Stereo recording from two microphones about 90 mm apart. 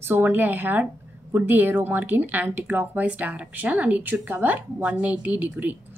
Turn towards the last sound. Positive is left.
turn(degrees=-20)  # may be behind; listen again after turning